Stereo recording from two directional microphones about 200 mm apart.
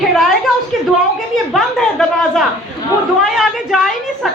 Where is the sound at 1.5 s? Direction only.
Centre (ahead or behind).